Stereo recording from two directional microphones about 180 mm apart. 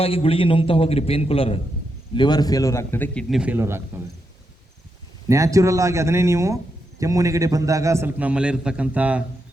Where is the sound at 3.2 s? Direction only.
5° right (ahead or behind).